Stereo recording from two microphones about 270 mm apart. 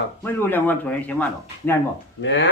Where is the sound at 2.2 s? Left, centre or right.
Left.